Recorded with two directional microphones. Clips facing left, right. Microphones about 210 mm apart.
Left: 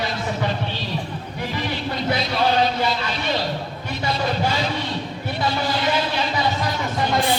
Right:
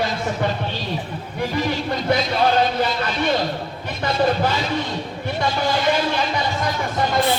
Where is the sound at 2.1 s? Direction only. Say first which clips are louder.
Right 3 dB; 50° right (ahead or behind).